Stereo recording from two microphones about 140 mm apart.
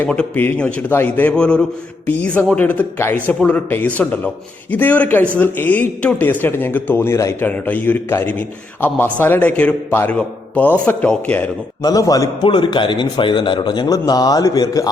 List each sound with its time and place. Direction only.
0.0 s a man's voice: 10° left (ahead or behind)
11.8 s a man's voice: 25° left (ahead or behind)